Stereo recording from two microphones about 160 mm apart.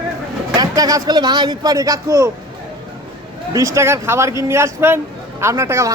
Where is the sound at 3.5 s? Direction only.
20° right (ahead or behind).